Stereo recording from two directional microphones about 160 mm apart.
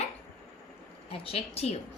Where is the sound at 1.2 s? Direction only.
35° left (ahead or behind).